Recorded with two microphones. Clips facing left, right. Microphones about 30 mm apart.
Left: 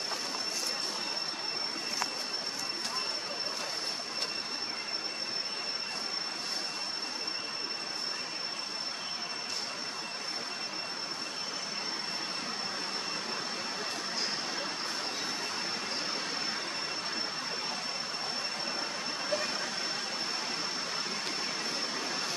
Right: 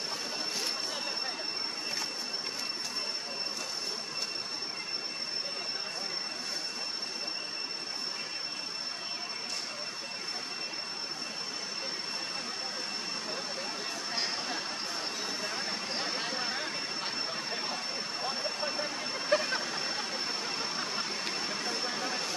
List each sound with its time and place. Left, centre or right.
18.2 s vehicle: centre
19.3 s a sound: right
21.6 s vehicle: centre